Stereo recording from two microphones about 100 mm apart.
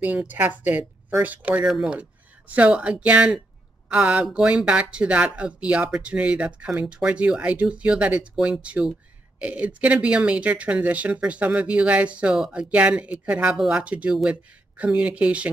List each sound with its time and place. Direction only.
0.0 s speech: 15° right (ahead or behind)